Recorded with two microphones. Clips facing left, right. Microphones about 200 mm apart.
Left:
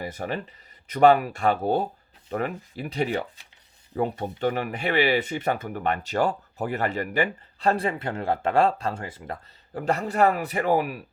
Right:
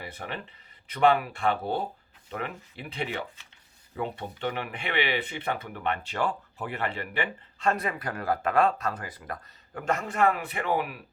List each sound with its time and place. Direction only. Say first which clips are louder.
0.0 s speech: left 7 dB; 40° left (ahead or behind)